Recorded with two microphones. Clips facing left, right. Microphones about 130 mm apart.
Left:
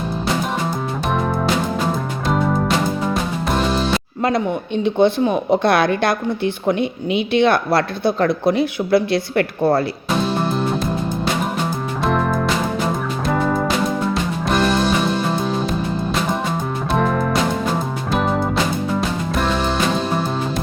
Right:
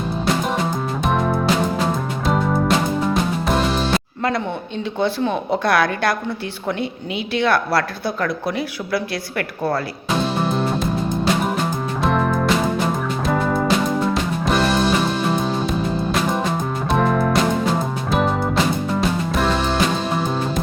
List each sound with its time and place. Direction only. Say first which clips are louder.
1.0 s music: right 1 dB; centre (ahead or behind)
4.2 s a sound: left 5 dB; 20° left (ahead or behind)
4.9 s a woman's voice: left 4 dB; 20° left (ahead or behind)
10.3 s music: left 1 dB; centre (ahead or behind)
12.0 s music: even; centre (ahead or behind)